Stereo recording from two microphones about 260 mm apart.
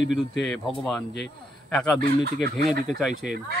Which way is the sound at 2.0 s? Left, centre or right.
Right.